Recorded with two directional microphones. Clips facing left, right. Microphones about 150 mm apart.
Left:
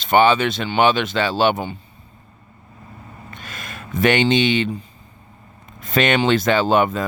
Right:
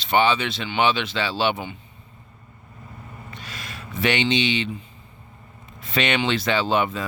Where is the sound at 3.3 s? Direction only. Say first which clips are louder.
Left 3 dB; 50° left (ahead or behind).